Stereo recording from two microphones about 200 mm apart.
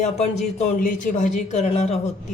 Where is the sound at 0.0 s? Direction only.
35° left (ahead or behind).